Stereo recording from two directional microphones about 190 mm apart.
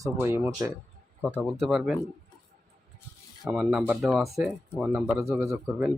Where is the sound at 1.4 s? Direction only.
Centre (ahead or behind).